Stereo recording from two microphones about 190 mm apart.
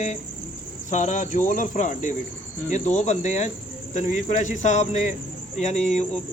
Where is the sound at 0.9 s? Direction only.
40° left (ahead or behind).